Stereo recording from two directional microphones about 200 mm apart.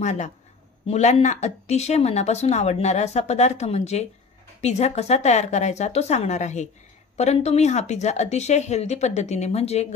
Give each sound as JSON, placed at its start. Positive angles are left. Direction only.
{"t": 0.0, "sound": "speech", "side_deg": 35}